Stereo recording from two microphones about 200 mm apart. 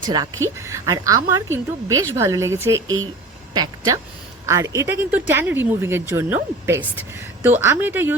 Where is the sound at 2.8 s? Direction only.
90° right.